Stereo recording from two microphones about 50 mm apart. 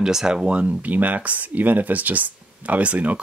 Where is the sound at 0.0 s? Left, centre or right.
Centre.